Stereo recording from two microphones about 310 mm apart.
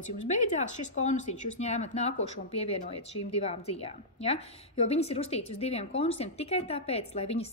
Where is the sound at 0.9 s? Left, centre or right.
Left.